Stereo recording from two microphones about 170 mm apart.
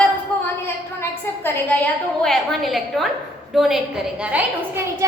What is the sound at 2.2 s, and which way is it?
A woman's voice, centre (ahead or behind).